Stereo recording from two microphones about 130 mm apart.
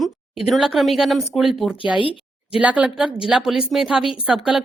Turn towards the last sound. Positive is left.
turn(degrees=-5)  # may be behind; listen again after turning